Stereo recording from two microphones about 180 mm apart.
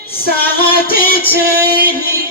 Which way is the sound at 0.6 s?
55° left (ahead or behind).